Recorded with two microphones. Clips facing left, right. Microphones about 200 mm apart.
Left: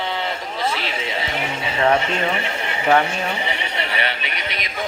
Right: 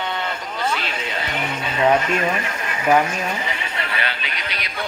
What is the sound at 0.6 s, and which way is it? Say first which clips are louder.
Speech: even; 15° left (ahead or behind).